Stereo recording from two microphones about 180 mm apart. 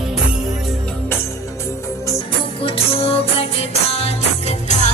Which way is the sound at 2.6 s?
30° left (ahead or behind).